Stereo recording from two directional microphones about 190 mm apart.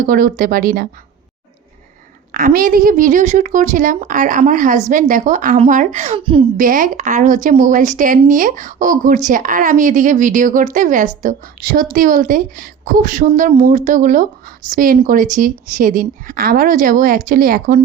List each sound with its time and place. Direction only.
0.0 s speech: 45° right (ahead or behind)
2.3 s a woman's voice: 45° right (ahead or behind)